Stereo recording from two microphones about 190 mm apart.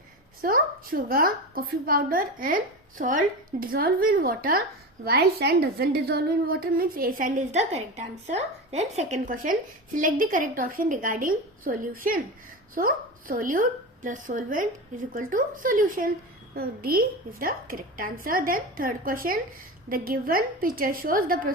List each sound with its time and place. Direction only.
0.4 s a woman's voice: 50° right (ahead or behind)